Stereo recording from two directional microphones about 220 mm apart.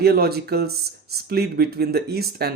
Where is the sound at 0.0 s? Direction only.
45° right (ahead or behind).